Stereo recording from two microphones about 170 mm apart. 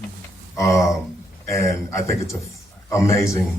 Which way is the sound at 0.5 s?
20° left (ahead or behind).